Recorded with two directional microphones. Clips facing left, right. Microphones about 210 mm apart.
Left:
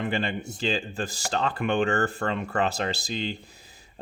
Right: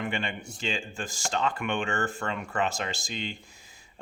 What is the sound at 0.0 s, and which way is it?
Speech, 35° left (ahead or behind).